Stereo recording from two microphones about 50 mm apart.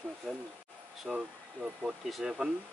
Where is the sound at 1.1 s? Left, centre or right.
Centre.